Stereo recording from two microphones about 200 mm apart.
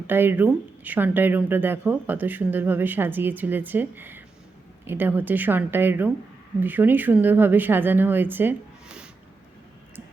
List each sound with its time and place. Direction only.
0.1 s a woman's voice: 10° right (ahead or behind)